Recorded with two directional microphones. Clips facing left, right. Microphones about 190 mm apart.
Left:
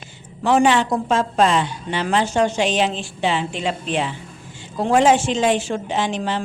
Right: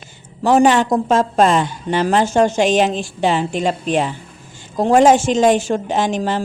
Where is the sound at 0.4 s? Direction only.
40° right (ahead or behind).